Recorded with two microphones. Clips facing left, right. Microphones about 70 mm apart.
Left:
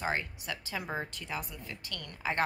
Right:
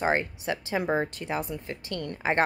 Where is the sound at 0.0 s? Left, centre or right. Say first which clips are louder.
Right 8 dB; right.